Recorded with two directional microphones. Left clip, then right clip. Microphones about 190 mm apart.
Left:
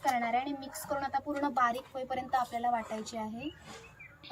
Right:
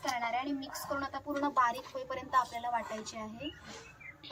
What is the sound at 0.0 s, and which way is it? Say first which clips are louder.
A woman's voice: left 4 dB; centre (ahead or behind).